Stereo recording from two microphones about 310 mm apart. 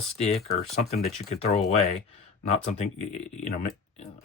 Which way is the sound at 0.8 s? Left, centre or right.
Left.